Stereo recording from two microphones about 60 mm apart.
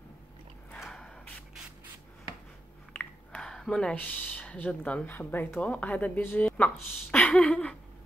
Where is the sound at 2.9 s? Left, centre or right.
Centre.